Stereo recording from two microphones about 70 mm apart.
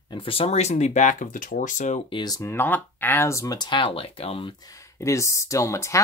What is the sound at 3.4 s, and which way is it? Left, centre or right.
Speech, left.